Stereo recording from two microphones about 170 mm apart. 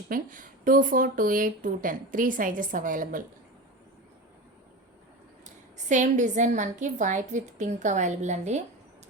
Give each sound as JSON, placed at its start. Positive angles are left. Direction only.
{"t": 0.1, "sound": "speech", "side_deg": -50}
{"t": 5.7, "sound": "speech", "side_deg": -45}